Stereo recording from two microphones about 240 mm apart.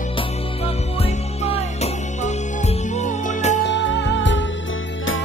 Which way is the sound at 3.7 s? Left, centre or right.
Left.